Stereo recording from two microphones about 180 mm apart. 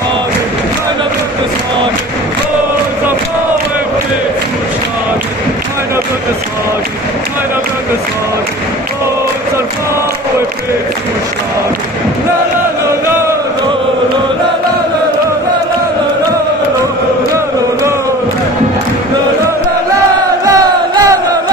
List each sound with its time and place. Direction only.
20.4 s crowd: 20° right (ahead or behind)